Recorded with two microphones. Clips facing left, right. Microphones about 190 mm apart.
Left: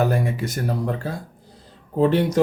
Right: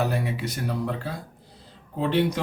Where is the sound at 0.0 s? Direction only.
45° left (ahead or behind).